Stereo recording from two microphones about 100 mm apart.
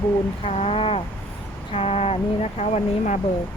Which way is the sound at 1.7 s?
90° left.